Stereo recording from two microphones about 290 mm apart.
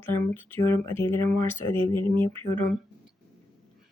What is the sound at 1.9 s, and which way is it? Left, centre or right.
Speech, left.